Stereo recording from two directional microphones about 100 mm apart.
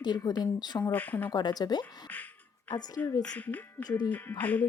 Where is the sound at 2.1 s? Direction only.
15° left (ahead or behind).